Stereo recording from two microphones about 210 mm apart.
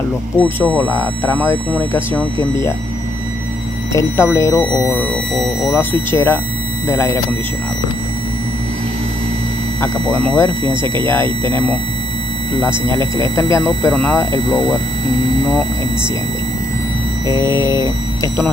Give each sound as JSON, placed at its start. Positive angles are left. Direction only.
{"t": 0.6, "sound": "speech", "side_deg": 10}
{"t": 3.9, "sound": "speech", "side_deg": 15}
{"t": 9.8, "sound": "speech", "side_deg": 10}
{"t": 10.7, "sound": "speech", "side_deg": -20}
{"t": 12.5, "sound": "speech", "side_deg": 15}
{"t": 14.3, "sound": "speech", "side_deg": 20}
{"t": 17.3, "sound": "speech", "side_deg": 15}